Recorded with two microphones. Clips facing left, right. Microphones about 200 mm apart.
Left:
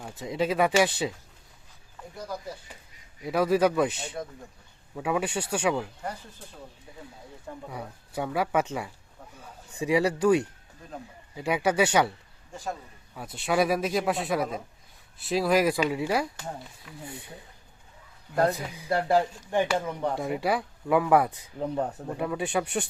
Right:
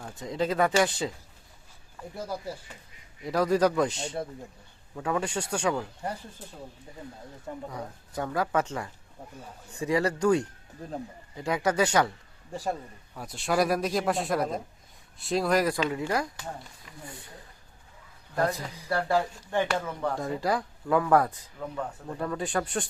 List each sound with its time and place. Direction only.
0.0 s speech: 10° left (ahead or behind)
3.2 s a man's voice: 5° left (ahead or behind)
3.9 s speech: 25° right (ahead or behind)
4.9 s speech: 10° left (ahead or behind)
7.7 s speech: 10° left (ahead or behind)
13.1 s a man's voice: centre (ahead or behind)
18.3 s speech: 30° left (ahead or behind); by 21.3 s 10° left (ahead or behind)
21.6 s speech: 35° left (ahead or behind)
22.2 s speech: 10° left (ahead or behind)